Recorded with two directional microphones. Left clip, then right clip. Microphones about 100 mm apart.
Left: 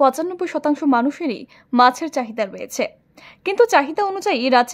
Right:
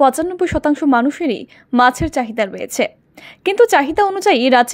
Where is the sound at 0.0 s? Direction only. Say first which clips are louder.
Right 3 dB; 15° right (ahead or behind).